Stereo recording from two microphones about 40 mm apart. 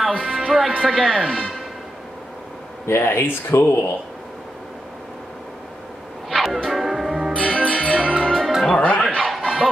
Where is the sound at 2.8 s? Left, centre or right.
Left.